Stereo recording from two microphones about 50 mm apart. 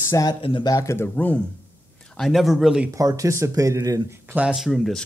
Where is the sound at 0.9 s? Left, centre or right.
Left.